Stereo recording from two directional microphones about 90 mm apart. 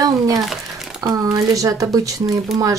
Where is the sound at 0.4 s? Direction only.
Centre (ahead or behind).